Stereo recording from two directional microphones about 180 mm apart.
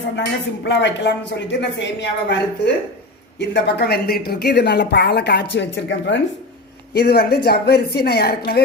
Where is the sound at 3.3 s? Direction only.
75° left (ahead or behind).